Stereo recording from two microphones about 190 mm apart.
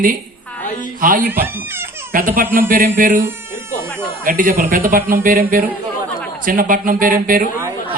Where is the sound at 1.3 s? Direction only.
10° right (ahead or behind).